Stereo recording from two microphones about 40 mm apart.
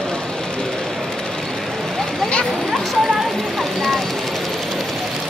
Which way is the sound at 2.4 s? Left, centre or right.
Centre.